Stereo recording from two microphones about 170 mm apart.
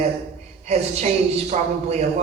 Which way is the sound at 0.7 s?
40° right (ahead or behind).